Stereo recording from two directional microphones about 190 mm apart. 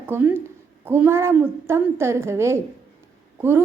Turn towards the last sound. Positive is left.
turn(degrees=-10)  # may be behind; listen again after turning